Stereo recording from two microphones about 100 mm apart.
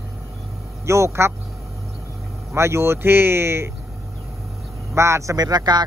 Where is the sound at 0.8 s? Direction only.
30° right (ahead or behind).